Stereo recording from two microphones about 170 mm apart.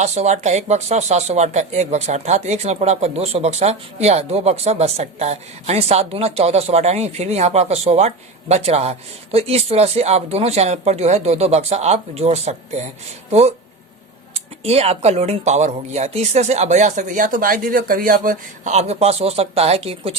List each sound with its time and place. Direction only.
0.0 s speech: 40° right (ahead or behind)
14.3 s speech: 35° right (ahead or behind)